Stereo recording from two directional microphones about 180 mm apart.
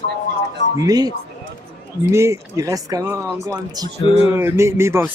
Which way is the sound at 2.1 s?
15° right (ahead or behind).